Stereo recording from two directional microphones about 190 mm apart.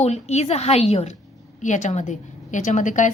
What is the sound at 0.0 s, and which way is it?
A woman's voice, 35° left (ahead or behind).